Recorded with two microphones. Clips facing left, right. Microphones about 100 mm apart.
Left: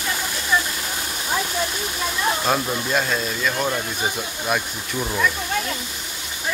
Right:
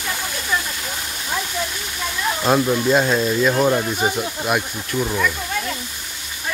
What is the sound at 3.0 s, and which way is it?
Speech, 25° right (ahead or behind).